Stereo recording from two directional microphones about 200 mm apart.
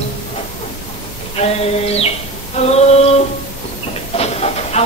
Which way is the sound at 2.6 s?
30° left (ahead or behind).